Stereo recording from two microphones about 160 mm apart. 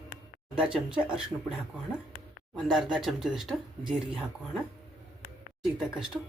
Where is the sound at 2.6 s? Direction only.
Centre (ahead or behind).